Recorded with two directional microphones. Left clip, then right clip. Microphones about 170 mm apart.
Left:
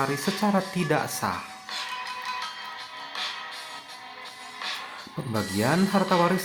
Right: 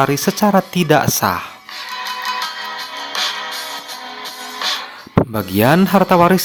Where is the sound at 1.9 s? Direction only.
60° right (ahead or behind).